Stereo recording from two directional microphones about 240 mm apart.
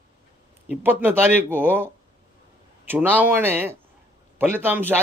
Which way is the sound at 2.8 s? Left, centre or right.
Centre.